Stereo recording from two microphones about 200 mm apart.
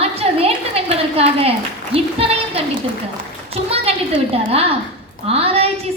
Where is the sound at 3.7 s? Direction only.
30° right (ahead or behind).